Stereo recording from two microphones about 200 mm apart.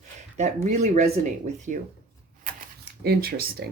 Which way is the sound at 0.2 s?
35° right (ahead or behind).